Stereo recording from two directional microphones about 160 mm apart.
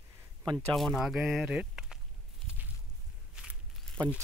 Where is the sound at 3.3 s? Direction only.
5° right (ahead or behind).